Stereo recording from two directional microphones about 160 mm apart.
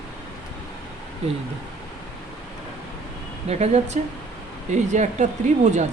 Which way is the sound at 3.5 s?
45° right (ahead or behind).